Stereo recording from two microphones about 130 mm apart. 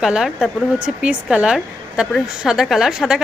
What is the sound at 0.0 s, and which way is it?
A woman's voice, 5° right (ahead or behind).